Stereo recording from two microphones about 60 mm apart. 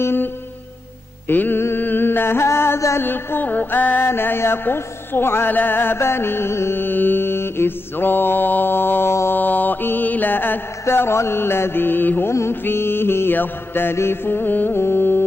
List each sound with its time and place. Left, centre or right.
0.0 s music: left
1.3 s music: left
1.8 s a sound: left
3.0 s music: left
12.3 s music: left